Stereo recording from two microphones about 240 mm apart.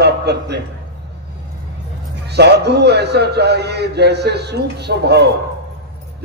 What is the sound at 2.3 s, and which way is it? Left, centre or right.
A man's voice, right.